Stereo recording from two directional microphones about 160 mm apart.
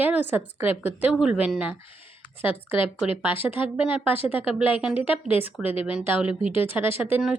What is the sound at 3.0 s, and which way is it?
Speech, 10° right (ahead or behind).